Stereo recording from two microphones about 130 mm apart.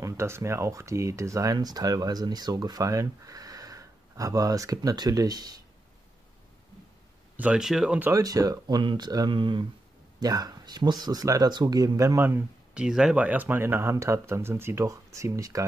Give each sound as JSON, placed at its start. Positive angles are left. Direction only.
{"t": 0.0, "sound": "speech", "side_deg": -20}
{"t": 7.3, "sound": "speech", "side_deg": -10}
{"t": 8.1, "sound": "speech", "side_deg": -25}
{"t": 12.2, "sound": "speech", "side_deg": -15}
{"t": 12.8, "sound": "speech", "side_deg": -5}